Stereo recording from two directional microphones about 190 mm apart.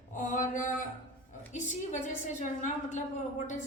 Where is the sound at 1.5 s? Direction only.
40° left (ahead or behind).